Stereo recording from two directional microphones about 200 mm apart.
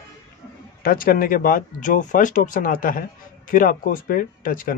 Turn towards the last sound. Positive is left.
turn(degrees=45)  # may be behind; listen again after turning